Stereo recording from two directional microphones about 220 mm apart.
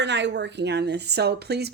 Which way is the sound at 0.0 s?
55° right (ahead or behind).